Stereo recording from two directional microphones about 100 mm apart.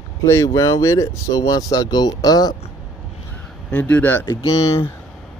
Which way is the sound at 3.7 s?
15° left (ahead or behind).